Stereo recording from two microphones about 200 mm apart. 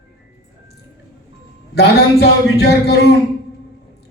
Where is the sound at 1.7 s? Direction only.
55° left (ahead or behind).